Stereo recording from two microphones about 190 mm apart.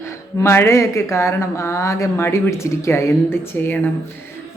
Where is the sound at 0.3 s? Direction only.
15° left (ahead or behind).